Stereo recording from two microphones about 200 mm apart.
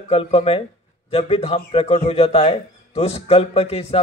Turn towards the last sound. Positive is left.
turn(degrees=30)  # may be behind; listen again after turning